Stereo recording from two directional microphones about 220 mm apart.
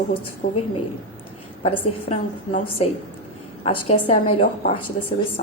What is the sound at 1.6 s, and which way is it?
A woman's voice, 35° left (ahead or behind).